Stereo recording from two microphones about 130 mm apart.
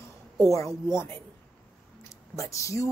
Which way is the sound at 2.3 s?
25° left (ahead or behind).